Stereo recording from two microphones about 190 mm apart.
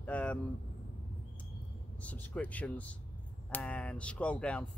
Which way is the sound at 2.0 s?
5° left (ahead or behind).